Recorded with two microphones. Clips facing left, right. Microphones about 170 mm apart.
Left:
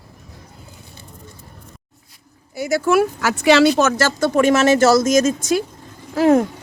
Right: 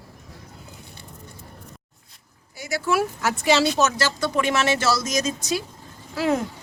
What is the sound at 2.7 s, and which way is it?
Speech, 50° left (ahead or behind).